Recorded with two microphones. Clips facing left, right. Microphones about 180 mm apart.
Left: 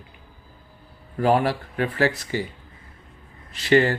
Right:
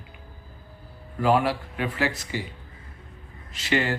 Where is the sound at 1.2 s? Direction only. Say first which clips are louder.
Left 2 dB; 40° left (ahead or behind).